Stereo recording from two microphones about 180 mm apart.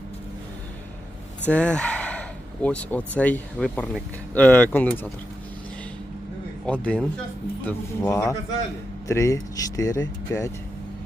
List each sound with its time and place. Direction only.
1.5 s speech: 5° left (ahead or behind)
6.7 s speech: 5° left (ahead or behind)